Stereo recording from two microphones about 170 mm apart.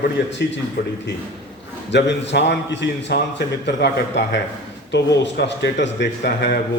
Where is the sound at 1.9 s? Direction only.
90° left.